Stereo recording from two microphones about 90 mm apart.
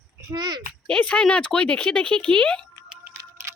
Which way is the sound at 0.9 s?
15° left (ahead or behind).